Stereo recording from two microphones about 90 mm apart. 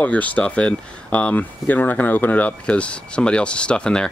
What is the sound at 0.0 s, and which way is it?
Speech, 15° left (ahead or behind).